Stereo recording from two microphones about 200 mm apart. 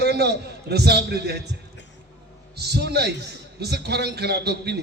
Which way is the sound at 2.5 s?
55° right (ahead or behind).